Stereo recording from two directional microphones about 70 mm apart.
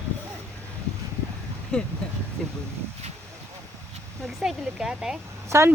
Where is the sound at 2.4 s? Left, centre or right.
Centre.